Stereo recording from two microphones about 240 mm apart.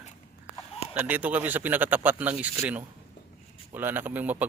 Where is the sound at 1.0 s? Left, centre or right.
Centre.